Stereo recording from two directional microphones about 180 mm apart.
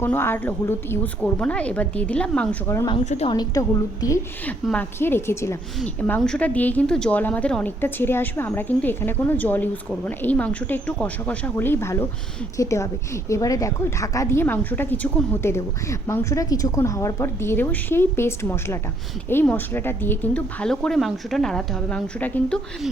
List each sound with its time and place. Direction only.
0.0 s a woman's voice: 10° left (ahead or behind)
3.0 s a woman's voice: 40° left (ahead or behind)
3.2 s a woman's voice: 20° left (ahead or behind); by 22.9 s 5° left (ahead or behind)